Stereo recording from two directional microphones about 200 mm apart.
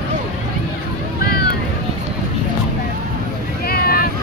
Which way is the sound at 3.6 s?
50° left (ahead or behind).